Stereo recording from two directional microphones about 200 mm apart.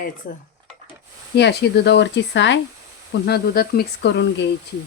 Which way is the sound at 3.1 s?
55° left (ahead or behind).